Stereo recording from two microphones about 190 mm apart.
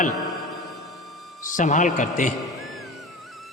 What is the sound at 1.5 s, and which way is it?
Speech, 40° left (ahead or behind).